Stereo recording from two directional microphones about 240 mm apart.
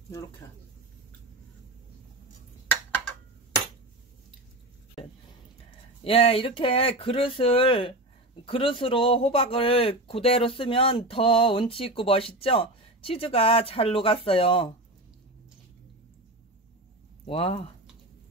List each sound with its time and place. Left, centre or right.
5.0 s a sound: left
6.0 s speech: left
17.3 s speech: left